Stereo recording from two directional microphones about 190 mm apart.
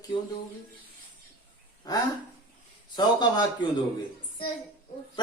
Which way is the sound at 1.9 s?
20° left (ahead or behind).